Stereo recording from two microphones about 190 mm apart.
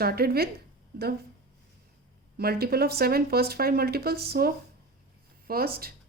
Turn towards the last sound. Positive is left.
turn(degrees=-50)  # may be behind; listen again after turning